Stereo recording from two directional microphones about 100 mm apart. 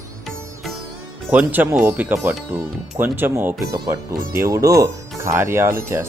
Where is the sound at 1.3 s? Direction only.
15° right (ahead or behind).